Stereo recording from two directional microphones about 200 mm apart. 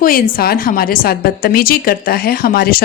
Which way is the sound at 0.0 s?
45° left (ahead or behind).